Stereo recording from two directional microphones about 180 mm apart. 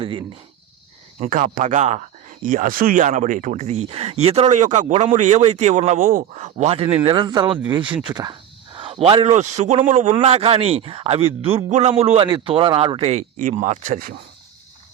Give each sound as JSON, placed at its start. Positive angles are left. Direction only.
{"t": 0.0, "sound": "speech", "side_deg": -30}
{"t": 1.2, "sound": "speech", "side_deg": -45}
{"t": 8.0, "sound": "a sound", "side_deg": -25}
{"t": 9.3, "sound": "speech", "side_deg": -40}